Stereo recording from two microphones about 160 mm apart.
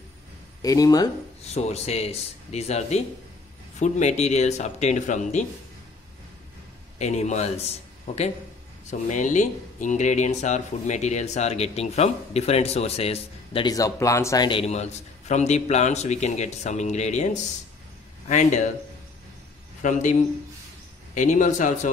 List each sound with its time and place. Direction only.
0.6 s speech: 20° left (ahead or behind)
1.4 s speech: 45° left (ahead or behind)
7.0 s a man's voice: 45° left (ahead or behind)
13.7 s speech: 20° left (ahead or behind)
14.5 s speech: 40° left (ahead or behind)
19.8 s speech: 50° left (ahead or behind)